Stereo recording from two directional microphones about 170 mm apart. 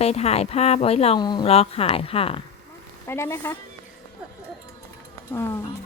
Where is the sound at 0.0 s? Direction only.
40° left (ahead or behind).